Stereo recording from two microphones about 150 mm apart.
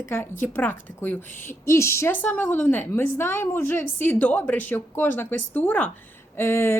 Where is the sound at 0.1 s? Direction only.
15° left (ahead or behind).